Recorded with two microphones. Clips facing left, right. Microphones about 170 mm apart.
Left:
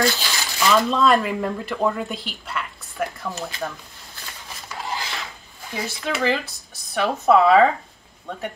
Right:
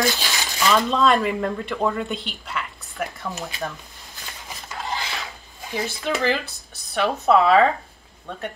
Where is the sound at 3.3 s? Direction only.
15° right (ahead or behind).